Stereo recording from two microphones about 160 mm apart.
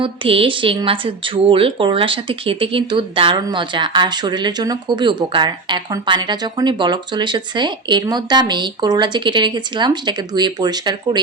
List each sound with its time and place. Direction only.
0.0 s speech: 35° right (ahead or behind)